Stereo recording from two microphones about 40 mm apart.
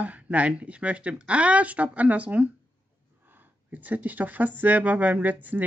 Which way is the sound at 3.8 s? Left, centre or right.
Right.